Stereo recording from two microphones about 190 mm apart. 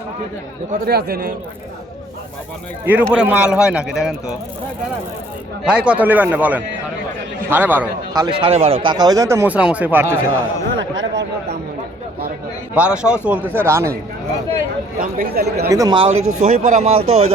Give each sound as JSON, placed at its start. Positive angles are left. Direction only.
{"t": 0.7, "sound": "speech", "side_deg": -55}
{"t": 2.8, "sound": "a man's voice", "side_deg": -5}
{"t": 5.6, "sound": "a man's voice", "side_deg": -5}
{"t": 10.8, "sound": "a sound", "side_deg": -75}
{"t": 12.7, "sound": "a man's voice", "side_deg": -5}
{"t": 15.0, "sound": "speech", "side_deg": -50}
{"t": 15.7, "sound": "a man's voice", "side_deg": -15}
{"t": 16.4, "sound": "speech", "side_deg": -40}